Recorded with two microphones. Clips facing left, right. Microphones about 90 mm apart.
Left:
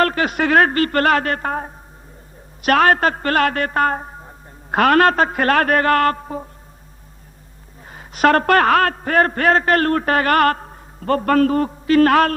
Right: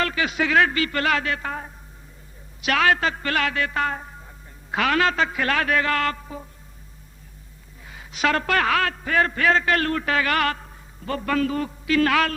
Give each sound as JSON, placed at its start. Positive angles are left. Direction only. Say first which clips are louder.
{"t": 0.0, "sound": "a man's voice", "louder": "left 6 dB", "side_deg": 45}
{"t": 4.7, "sound": "a man's voice", "louder": "left 8 dB", "side_deg": 50}
{"t": 7.9, "sound": "a man's voice", "louder": "left 8 dB", "side_deg": 45}